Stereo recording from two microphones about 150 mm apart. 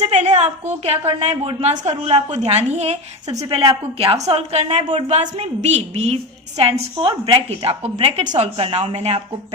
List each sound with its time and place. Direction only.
0.0 s a woman's voice: 50° right (ahead or behind)